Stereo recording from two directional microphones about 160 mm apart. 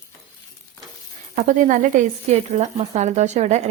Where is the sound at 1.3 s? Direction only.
50° right (ahead or behind).